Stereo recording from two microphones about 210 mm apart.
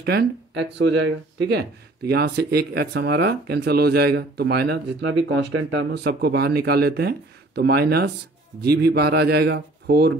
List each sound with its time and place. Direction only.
0.0 s speech: 50° right (ahead or behind)